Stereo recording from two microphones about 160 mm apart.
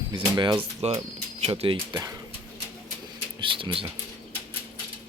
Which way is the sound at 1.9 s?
20° right (ahead or behind).